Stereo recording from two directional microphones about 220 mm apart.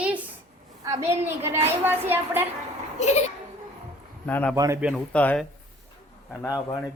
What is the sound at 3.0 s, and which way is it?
Speech, 30° left (ahead or behind).